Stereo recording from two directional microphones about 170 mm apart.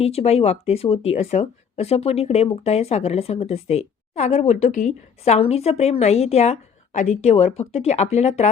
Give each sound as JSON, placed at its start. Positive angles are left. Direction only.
{"t": 0.0, "sound": "speech", "side_deg": 35}